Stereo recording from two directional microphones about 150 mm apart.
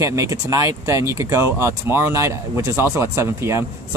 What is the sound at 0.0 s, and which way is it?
Speech, 20° right (ahead or behind).